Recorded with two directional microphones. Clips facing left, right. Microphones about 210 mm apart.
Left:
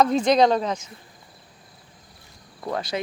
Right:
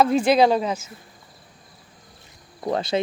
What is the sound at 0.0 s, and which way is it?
Speech, 10° right (ahead or behind).